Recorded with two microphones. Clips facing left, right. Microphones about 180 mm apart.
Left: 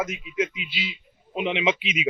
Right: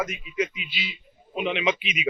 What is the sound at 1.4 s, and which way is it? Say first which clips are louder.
Speech: left 1 dB; 20° left (ahead or behind).